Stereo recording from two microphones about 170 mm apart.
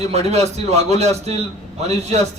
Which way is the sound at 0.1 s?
40° right (ahead or behind).